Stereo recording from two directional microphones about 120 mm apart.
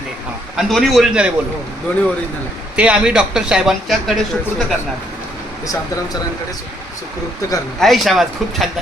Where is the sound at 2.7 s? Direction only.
10° right (ahead or behind).